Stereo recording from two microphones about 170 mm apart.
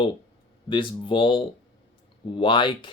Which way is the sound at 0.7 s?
30° left (ahead or behind).